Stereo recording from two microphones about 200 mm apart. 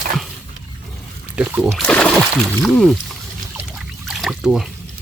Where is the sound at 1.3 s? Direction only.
5° right (ahead or behind).